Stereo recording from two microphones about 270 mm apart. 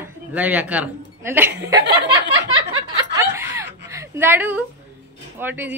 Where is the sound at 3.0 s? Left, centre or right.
Centre.